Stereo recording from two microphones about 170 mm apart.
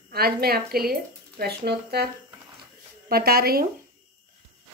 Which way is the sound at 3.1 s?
65° right (ahead or behind).